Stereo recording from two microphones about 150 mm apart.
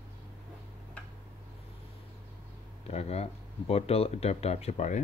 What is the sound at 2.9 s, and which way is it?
Speech, 45° left (ahead or behind).